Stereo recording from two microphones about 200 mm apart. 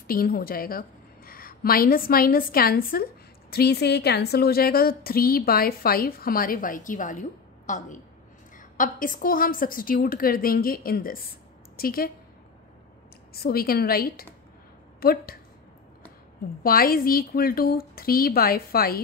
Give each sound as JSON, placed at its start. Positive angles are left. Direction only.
{"t": 0.0, "sound": "a woman's voice", "side_deg": 45}
{"t": 13.3, "sound": "a woman's voice", "side_deg": 50}
{"t": 16.6, "sound": "a woman's voice", "side_deg": 45}